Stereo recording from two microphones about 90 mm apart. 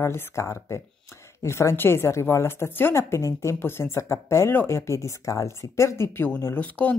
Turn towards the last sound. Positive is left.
turn(degrees=20)  # may be behind; listen again after turning